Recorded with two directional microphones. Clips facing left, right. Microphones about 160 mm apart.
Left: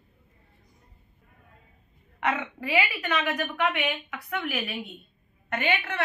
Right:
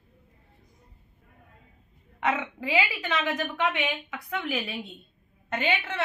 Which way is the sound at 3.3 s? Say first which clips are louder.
Even; 10° right (ahead or behind).